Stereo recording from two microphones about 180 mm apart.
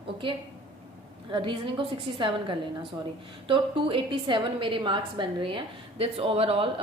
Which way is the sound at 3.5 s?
30° right (ahead or behind).